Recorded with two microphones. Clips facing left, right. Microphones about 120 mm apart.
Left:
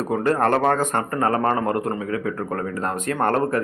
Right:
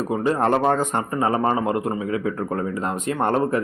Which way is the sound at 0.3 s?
15° right (ahead or behind).